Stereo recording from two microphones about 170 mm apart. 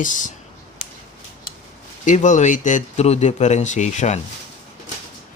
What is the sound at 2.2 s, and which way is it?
Speech, 45° left (ahead or behind).